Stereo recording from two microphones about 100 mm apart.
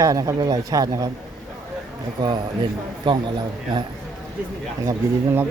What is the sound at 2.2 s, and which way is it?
A man's voice, 50° right (ahead or behind).